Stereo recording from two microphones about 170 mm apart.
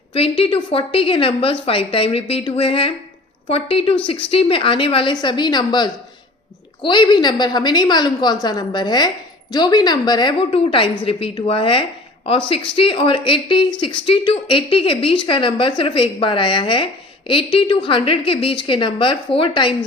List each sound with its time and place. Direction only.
0.1 s a woman's voice: 35° left (ahead or behind)